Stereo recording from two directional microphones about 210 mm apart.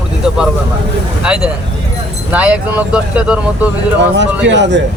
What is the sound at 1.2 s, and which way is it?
Speech, 5° right (ahead or behind).